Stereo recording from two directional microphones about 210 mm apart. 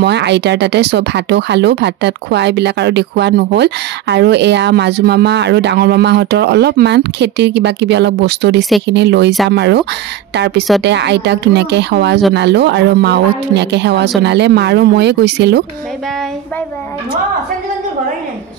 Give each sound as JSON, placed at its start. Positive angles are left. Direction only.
{"t": 0.0, "sound": "a woman's voice", "side_deg": -55}